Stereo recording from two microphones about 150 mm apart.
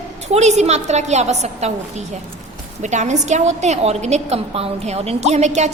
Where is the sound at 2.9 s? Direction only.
50° right (ahead or behind).